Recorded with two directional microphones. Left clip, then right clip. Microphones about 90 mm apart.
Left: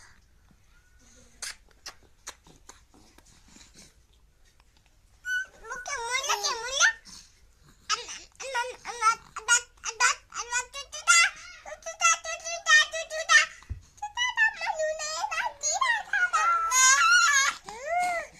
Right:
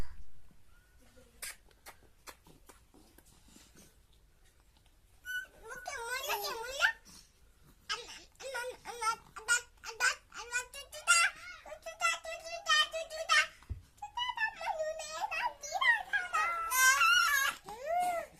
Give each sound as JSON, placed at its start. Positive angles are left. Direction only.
{"t": 5.6, "sound": "babbling", "side_deg": -20}
{"t": 7.9, "sound": "a sound", "side_deg": -10}
{"t": 14.2, "sound": "music", "side_deg": 10}
{"t": 17.7, "sound": "baby cry", "side_deg": -35}